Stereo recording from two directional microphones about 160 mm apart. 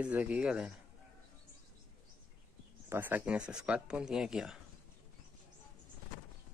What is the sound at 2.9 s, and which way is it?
Speech, 10° right (ahead or behind).